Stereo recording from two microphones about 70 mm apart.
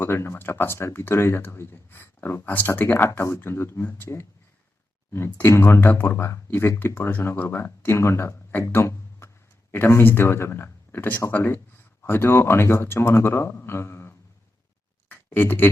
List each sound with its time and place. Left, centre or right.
0.0 s speech: left
3.2 s speech: left
5.5 s speech: left
8.7 s a sound: left
9.7 s speech: left
15.1 s a sound: left